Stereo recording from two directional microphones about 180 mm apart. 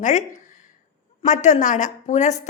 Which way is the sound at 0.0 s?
45° left (ahead or behind).